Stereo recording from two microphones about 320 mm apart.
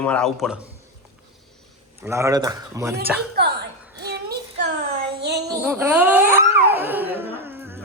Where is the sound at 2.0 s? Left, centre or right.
Centre.